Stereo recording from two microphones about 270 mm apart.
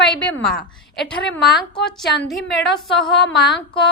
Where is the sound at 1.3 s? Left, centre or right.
Centre.